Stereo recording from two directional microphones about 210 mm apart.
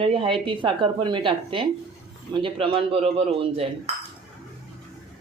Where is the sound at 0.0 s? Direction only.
25° right (ahead or behind).